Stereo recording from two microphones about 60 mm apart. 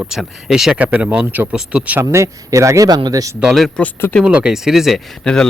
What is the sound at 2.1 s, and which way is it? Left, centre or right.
Speech, right.